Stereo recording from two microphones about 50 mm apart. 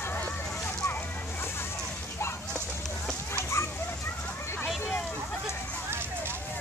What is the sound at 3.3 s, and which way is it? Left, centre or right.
Dog, left.